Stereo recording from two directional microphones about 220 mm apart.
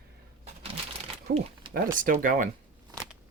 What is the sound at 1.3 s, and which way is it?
Speech, 50° right (ahead or behind).